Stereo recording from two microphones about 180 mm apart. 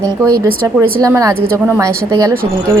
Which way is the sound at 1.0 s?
15° right (ahead or behind).